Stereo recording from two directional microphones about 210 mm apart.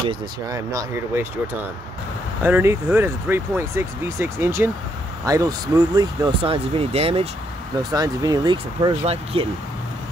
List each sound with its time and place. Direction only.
0.1 s speech: 15° right (ahead or behind)